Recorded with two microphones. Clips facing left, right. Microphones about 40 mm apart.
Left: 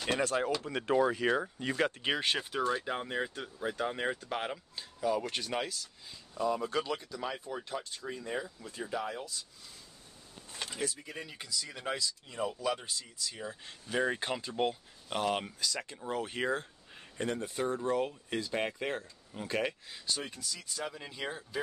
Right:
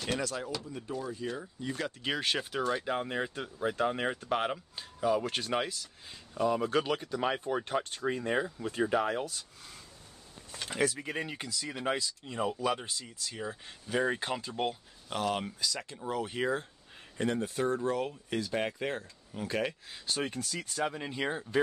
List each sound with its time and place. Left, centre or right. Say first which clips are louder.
0.2 s speech: left 5 dB; left
0.7 s speech: left 9 dB; left
2.0 s speech: left 1 dB; centre
2.3 s speech: even; centre
6.0 s speech: right 3 dB; right
10.7 s speech: right 8 dB; right
11.1 s speech: right 7 dB; right
11.5 s speech: right 3 dB; centre
13.7 s speech: right 1 dB; centre
15.0 s speech: even; centre
20.1 s speech: right 4 dB; right
20.8 s speech: right 6 dB; right